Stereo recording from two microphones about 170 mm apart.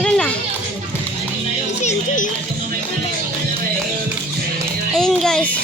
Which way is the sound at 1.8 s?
45° left (ahead or behind).